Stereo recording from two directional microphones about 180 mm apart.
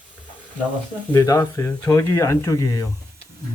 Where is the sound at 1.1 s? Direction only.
20° left (ahead or behind).